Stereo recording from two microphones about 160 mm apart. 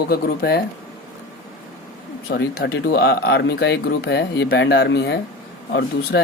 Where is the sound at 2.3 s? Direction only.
80° left.